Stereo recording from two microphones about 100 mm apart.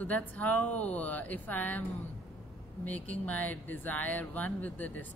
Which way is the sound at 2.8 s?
15° left (ahead or behind).